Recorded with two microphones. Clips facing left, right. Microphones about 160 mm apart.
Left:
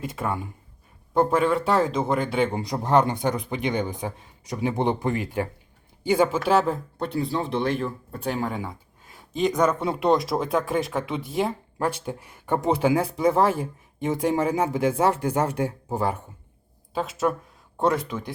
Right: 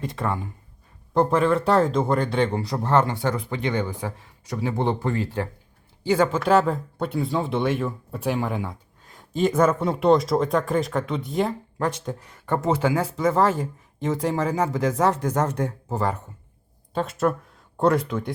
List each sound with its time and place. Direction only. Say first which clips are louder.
0.0 s speech: right 1 dB; 5° left (ahead or behind)
2.6 s speech: even; 15° left (ahead or behind); by 18.3 s centre (ahead or behind)